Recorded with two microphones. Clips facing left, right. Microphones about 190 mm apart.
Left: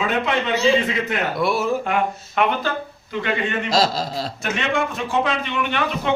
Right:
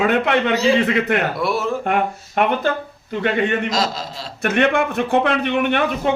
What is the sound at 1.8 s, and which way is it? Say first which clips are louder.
Speech: right 2 dB; 55° right (ahead or behind).